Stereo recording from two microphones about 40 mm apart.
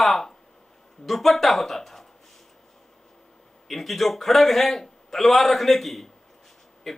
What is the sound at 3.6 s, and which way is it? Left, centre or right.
A man's voice, centre.